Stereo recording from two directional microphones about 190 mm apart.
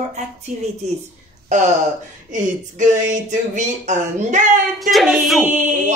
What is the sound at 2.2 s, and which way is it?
Speech, 40° right (ahead or behind).